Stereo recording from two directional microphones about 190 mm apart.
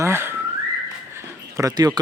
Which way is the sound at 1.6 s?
20° right (ahead or behind).